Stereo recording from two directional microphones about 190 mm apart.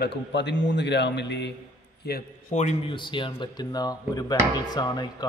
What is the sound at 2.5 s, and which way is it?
Speech, 35° left (ahead or behind).